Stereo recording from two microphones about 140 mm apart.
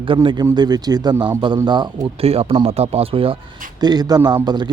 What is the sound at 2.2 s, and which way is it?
Speech, 45° right (ahead or behind).